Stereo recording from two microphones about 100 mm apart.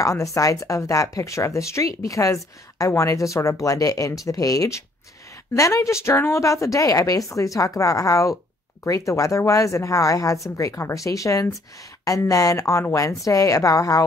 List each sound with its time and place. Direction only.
0.0 s speech: 35° left (ahead or behind)